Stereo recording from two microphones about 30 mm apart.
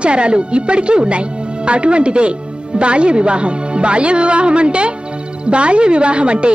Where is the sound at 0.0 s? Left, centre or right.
Right.